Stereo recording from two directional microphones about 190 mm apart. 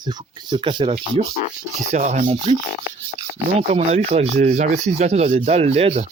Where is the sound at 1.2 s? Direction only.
35° right (ahead or behind).